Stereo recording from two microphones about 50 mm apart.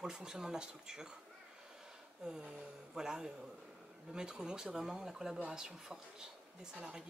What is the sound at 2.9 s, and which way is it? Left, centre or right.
Speech, centre.